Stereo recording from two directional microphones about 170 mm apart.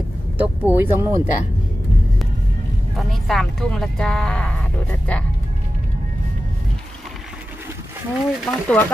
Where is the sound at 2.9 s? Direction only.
Centre (ahead or behind).